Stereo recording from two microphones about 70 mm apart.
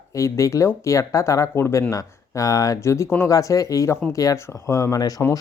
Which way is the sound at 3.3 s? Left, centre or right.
Left.